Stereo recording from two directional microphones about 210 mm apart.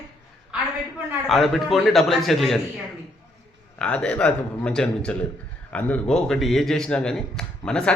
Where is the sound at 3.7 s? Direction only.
5° left (ahead or behind).